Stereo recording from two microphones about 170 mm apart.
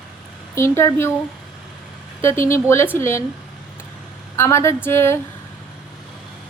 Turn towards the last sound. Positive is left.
turn(degrees=15)  # may be behind; listen again after turning